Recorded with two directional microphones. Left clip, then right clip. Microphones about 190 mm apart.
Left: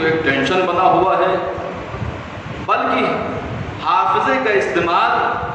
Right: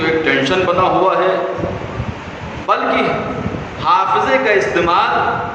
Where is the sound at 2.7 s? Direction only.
35° right (ahead or behind).